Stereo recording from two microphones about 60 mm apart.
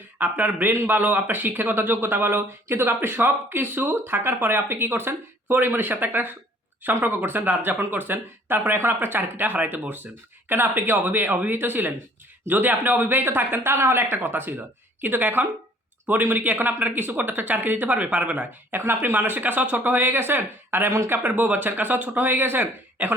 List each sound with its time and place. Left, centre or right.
0.2 s speech: right
18.7 s speech: right